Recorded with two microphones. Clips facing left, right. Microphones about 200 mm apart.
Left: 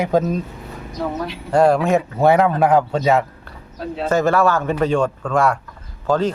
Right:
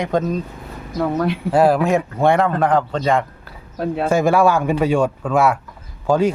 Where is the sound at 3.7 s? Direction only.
55° right (ahead or behind).